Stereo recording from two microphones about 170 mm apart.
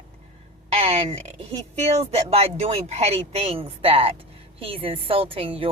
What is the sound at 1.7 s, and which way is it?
A woman's voice, 40° right (ahead or behind).